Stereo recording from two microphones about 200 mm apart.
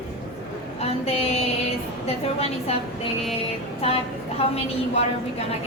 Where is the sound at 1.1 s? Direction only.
30° left (ahead or behind).